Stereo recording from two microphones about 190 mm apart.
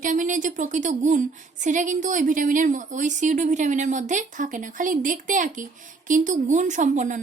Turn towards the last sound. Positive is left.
turn(degrees=-40)  # may be behind; listen again after turning